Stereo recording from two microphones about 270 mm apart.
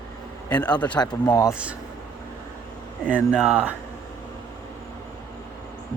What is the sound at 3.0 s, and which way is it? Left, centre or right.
Speech, centre.